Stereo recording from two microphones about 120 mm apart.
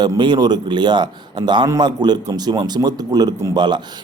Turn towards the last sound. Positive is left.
turn(degrees=-40)  # may be behind; listen again after turning